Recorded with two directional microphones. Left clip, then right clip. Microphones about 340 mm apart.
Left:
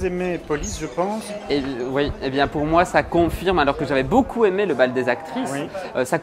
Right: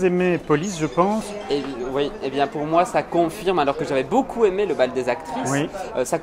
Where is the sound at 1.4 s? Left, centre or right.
Left.